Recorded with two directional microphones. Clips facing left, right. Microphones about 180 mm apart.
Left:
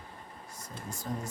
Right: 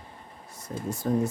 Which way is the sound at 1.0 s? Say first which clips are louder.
Right 11 dB; 55° right (ahead or behind).